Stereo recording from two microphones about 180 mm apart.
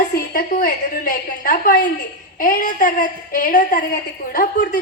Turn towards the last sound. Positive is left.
turn(degrees=50)  # may be behind; listen again after turning